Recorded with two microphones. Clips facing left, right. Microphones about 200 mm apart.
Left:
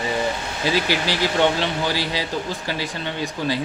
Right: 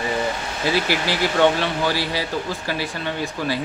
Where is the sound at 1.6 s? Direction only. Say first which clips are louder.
Right 1 dB; 15° left (ahead or behind).